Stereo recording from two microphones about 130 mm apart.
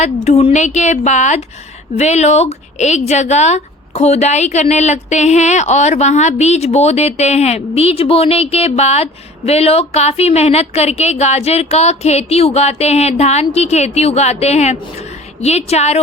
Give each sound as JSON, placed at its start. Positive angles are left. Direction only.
{"t": 0.0, "sound": "a woman's voice", "side_deg": 55}